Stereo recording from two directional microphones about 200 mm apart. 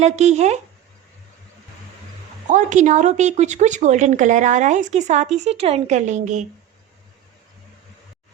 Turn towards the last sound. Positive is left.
turn(degrees=-35)  # may be behind; listen again after turning